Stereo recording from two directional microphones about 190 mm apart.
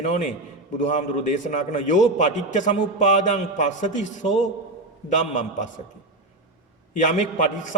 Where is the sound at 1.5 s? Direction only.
40° left (ahead or behind).